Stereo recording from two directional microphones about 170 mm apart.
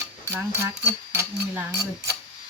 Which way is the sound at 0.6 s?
15° right (ahead or behind).